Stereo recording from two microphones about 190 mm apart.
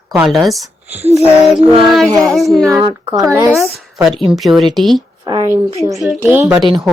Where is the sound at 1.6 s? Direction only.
25° right (ahead or behind).